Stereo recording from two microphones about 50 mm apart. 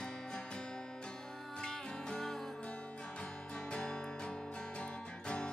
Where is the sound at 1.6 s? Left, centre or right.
Centre.